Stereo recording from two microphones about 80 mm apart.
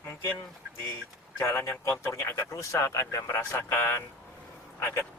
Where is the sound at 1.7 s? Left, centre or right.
Left.